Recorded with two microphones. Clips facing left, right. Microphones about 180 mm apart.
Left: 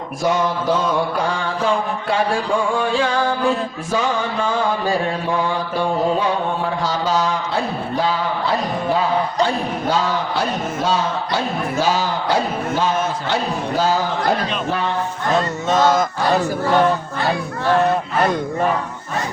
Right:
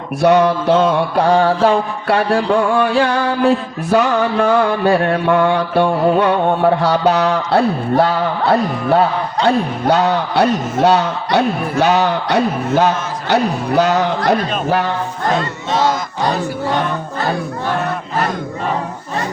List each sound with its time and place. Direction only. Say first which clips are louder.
0.2 s mantra: right 7 dB; 65° right (ahead or behind)